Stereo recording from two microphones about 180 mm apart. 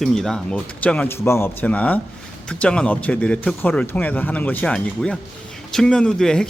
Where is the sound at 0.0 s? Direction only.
Centre (ahead or behind).